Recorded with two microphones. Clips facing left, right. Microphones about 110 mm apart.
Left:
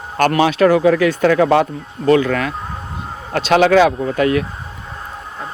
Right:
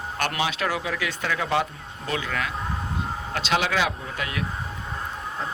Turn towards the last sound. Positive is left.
turn(degrees=50)  # may be behind; listen again after turning